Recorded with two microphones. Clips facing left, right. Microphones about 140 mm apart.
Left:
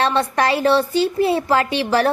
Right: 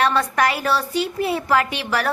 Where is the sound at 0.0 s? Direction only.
25° left (ahead or behind).